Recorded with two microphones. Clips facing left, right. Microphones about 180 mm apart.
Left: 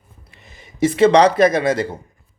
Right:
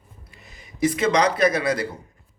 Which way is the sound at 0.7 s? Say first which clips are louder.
Left 7 dB; 25° left (ahead or behind).